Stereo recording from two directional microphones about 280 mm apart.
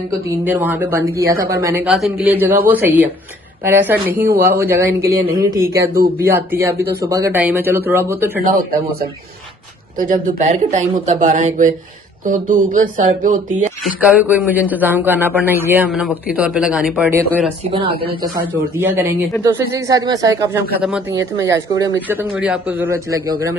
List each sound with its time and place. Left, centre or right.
0.4 s a man's voice: centre
8.4 s speech: right
13.8 s a man's voice: centre
17.2 s a man's voice: centre
18.0 s speech: centre
18.8 s speech: centre